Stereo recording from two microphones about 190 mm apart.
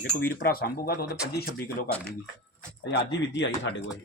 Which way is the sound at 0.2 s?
50° left (ahead or behind).